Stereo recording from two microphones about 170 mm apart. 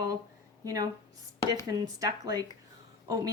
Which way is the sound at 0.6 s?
20° right (ahead or behind).